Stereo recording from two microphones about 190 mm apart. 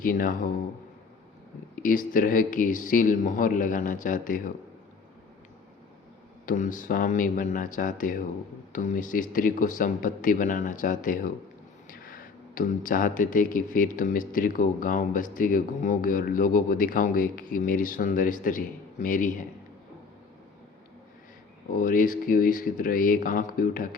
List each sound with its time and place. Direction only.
0.0 s speech: 45° left (ahead or behind)
1.7 s speech: 45° left (ahead or behind)
6.4 s speech: 45° left (ahead or behind)
21.7 s speech: 45° left (ahead or behind)